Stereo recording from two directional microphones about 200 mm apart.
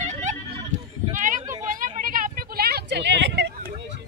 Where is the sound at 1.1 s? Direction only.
40° right (ahead or behind).